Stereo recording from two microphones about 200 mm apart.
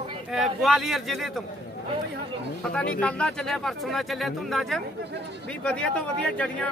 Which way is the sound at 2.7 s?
5° left (ahead or behind).